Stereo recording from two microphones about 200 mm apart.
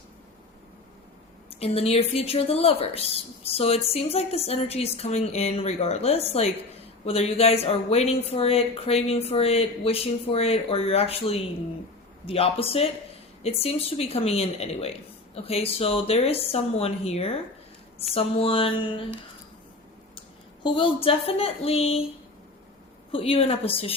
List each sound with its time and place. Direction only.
1.5 s speech: 30° left (ahead or behind)
20.7 s speech: 25° left (ahead or behind)
23.1 s speech: 30° left (ahead or behind)